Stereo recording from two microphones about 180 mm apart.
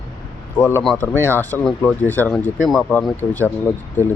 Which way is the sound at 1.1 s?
15° right (ahead or behind).